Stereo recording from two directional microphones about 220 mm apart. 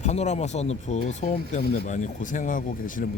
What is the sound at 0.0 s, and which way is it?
Speech, 30° left (ahead or behind).